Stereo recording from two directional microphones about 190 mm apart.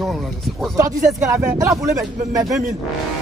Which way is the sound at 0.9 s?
40° right (ahead or behind).